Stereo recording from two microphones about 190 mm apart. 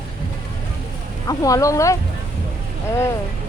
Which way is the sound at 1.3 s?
20° left (ahead or behind).